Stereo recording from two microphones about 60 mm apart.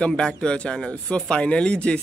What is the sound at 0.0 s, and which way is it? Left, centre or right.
Speech, centre.